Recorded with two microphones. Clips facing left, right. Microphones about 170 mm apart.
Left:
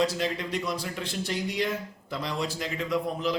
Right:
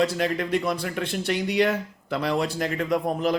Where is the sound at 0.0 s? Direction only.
60° right (ahead or behind).